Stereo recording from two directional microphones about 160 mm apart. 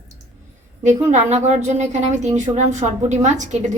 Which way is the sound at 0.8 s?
45° right (ahead or behind).